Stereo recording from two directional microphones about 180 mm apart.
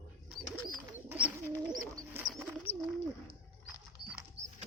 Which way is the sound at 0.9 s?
10° right (ahead or behind).